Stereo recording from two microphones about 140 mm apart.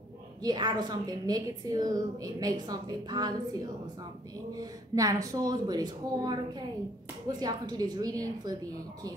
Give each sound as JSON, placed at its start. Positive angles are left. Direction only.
{"t": 0.4, "sound": "a woman's voice", "side_deg": -30}